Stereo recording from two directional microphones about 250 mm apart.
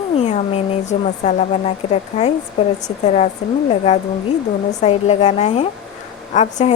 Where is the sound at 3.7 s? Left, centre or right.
Left.